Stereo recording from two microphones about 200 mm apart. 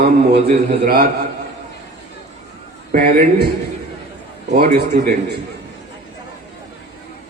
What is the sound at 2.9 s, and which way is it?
Speech, 45° right (ahead or behind).